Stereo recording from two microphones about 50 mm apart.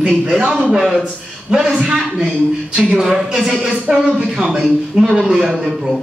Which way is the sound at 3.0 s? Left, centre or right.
Centre.